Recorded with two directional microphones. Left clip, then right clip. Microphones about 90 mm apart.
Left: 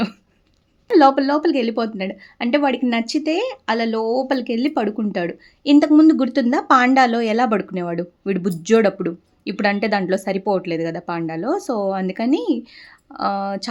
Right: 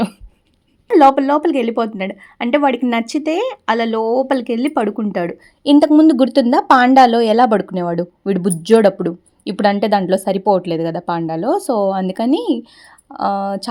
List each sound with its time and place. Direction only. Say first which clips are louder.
0.9 s speech: right 3 dB; 25° right (ahead or behind)
5.6 s speech: right 3 dB; 50° right (ahead or behind)
6.1 s speech: right 4 dB; 65° right (ahead or behind); by 12.9 s 50° right (ahead or behind)
13.1 s speech: right 3 dB; 30° right (ahead or behind)